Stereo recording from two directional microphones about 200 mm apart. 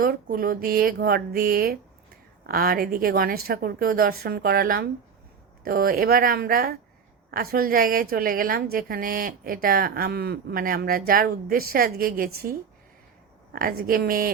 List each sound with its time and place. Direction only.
0.0 s a woman's voice: 45° right (ahead or behind)